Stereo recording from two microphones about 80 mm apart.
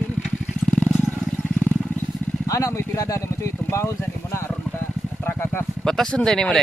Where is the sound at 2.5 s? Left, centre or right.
Left.